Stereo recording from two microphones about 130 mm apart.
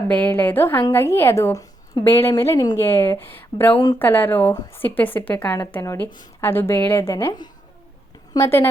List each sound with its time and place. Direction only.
0.1 s a woman's voice: 10° left (ahead or behind)
5.8 s a woman's voice: 25° left (ahead or behind)